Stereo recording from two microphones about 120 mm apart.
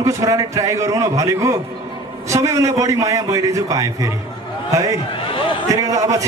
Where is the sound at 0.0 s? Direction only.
25° right (ahead or behind).